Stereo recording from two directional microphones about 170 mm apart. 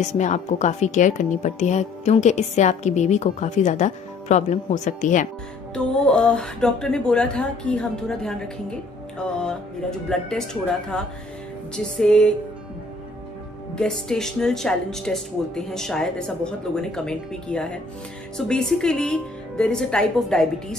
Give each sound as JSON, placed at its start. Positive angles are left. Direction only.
{"t": 0.1, "sound": "a woman's voice", "side_deg": 45}
{"t": 6.0, "sound": "speech", "side_deg": 5}
{"t": 13.7, "sound": "speech", "side_deg": 5}